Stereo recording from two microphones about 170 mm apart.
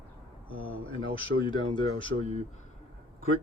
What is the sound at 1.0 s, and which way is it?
Speech, 30° left (ahead or behind).